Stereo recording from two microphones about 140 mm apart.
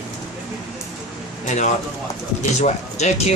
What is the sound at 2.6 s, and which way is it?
Speech, 55° left (ahead or behind).